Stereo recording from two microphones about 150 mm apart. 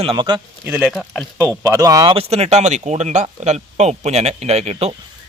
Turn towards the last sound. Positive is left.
turn(degrees=-45)  # may be behind; listen again after turning